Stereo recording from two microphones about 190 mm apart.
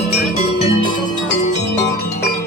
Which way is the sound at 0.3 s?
30° left (ahead or behind).